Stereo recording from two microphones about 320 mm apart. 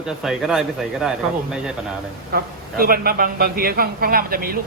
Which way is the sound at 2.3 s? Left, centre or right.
Right.